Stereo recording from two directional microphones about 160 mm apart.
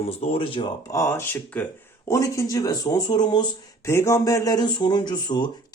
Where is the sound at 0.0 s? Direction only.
35° left (ahead or behind).